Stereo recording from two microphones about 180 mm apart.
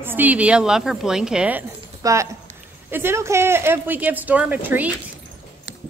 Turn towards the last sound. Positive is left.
turn(degrees=-10)  # may be behind; listen again after turning